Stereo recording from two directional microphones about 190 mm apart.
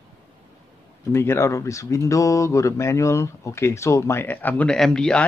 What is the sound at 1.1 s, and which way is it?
Speech, 15° left (ahead or behind).